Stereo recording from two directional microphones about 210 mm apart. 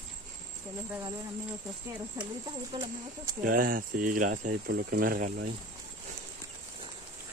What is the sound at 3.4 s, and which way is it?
Speech, 40° right (ahead or behind).